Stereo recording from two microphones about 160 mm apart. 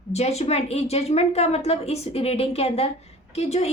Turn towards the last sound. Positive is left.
turn(degrees=40)  # may be behind; listen again after turning